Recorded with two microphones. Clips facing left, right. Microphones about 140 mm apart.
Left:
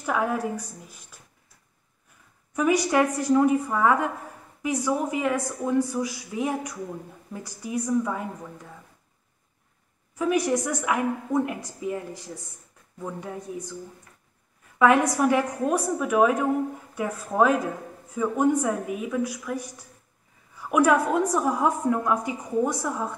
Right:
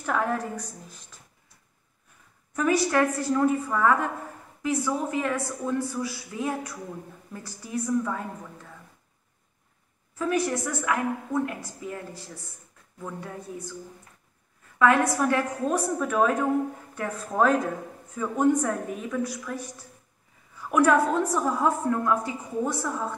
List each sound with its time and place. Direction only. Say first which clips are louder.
0.0 s a woman's voice: left 1 dB; 10° left (ahead or behind)
2.5 s a woman's voice: left 1 dB; 15° left (ahead or behind)
10.1 s a woman's voice: left 3 dB; 15° left (ahead or behind)
14.8 s a woman's voice: left 2 dB; 15° left (ahead or behind)
20.6 s a woman's voice: even; 10° left (ahead or behind)